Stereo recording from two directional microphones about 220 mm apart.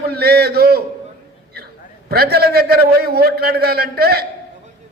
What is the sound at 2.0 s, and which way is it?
A man's voice, 45° right (ahead or behind).